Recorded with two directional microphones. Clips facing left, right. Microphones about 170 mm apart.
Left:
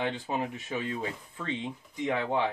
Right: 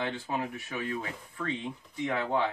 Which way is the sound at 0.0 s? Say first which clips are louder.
Left 2 dB; 20° left (ahead or behind).